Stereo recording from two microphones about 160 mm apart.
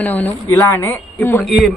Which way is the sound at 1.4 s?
Centre (ahead or behind).